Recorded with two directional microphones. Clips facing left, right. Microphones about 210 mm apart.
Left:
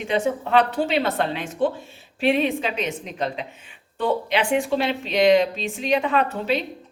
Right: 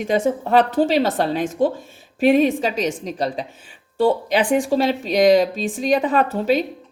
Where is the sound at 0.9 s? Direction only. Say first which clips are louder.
Right 4 dB; 40° right (ahead or behind).